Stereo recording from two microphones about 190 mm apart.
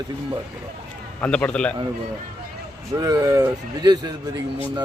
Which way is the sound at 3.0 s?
20° right (ahead or behind).